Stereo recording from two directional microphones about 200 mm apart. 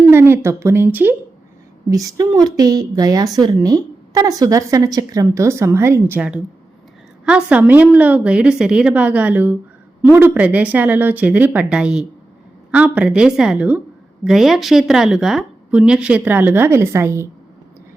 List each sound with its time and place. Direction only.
0.1 s speech: 10° right (ahead or behind)